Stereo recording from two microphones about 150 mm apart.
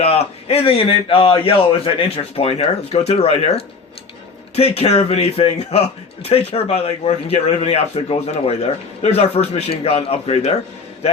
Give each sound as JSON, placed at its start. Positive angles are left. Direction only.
{"t": 0.0, "sound": "a man's voice", "side_deg": 40}